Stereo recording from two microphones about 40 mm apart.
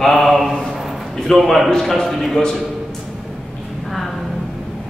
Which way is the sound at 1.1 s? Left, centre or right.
Centre.